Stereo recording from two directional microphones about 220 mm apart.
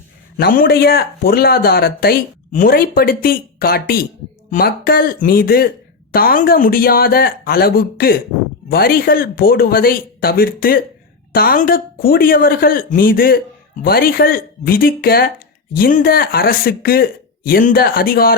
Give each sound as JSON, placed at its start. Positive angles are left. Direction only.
{"t": 0.3, "sound": "speech", "side_deg": 40}